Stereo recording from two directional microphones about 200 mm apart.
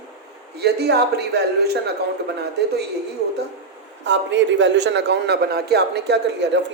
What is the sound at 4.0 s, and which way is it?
A man's voice, 65° right (ahead or behind).